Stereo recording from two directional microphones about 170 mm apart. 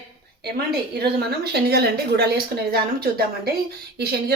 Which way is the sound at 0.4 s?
70° right (ahead or behind).